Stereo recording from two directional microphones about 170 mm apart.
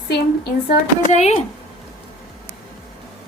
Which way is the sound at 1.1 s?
40° left (ahead or behind).